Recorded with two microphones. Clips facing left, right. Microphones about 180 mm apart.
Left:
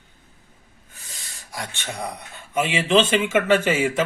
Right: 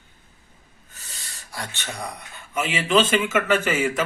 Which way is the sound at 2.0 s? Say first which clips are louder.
Left 3 dB; 20° left (ahead or behind).